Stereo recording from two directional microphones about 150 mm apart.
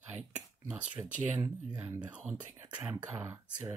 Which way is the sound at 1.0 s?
10° right (ahead or behind).